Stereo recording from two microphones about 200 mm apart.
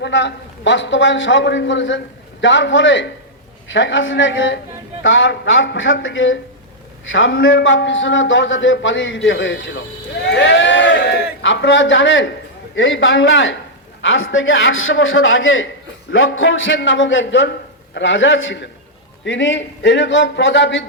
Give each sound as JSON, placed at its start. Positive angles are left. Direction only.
{"t": 0.0, "sound": "a man's voice", "side_deg": 60}